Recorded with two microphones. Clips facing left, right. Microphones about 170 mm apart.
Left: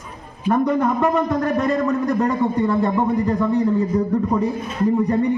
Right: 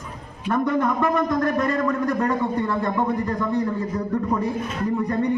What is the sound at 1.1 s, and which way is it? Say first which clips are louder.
A man's voice: left 2 dB; 10° left (ahead or behind).